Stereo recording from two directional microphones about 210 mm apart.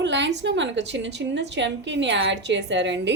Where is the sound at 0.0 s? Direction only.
55° right (ahead or behind).